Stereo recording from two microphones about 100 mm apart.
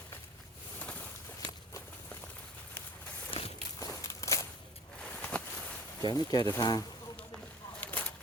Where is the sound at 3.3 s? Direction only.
65° left (ahead or behind).